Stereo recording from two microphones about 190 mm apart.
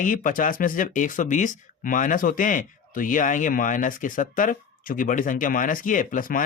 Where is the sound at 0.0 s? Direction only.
45° left (ahead or behind).